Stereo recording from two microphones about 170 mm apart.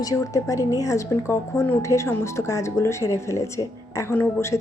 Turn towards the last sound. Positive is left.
turn(degrees=15)  # may be behind; listen again after turning